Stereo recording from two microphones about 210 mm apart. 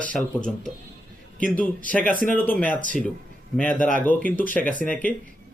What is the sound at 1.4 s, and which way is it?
Speech, 5° left (ahead or behind).